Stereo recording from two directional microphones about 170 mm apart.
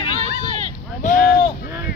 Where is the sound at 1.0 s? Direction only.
50° left (ahead or behind).